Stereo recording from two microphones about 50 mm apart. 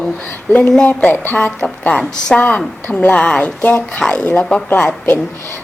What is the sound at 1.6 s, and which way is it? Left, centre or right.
A woman's voice, left.